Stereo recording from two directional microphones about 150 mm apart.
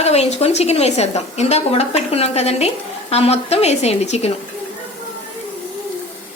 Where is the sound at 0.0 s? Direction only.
45° left (ahead or behind).